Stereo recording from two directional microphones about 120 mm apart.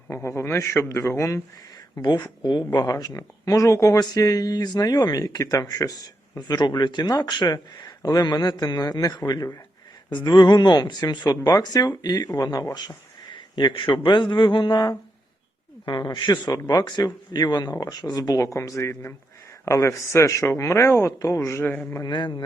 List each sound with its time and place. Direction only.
0.1 s speech: 20° left (ahead or behind)
2.0 s a man's voice: 35° left (ahead or behind); by 21.9 s 15° left (ahead or behind)
21.9 s speech: 35° left (ahead or behind)